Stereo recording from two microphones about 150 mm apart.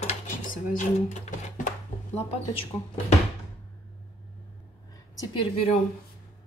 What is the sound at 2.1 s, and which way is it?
Speech, 40° left (ahead or behind).